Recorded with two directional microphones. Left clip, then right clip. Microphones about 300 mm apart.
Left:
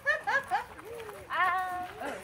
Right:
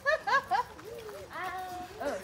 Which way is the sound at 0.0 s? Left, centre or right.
Centre.